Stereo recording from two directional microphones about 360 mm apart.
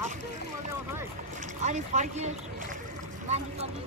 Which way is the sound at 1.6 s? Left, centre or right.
Centre.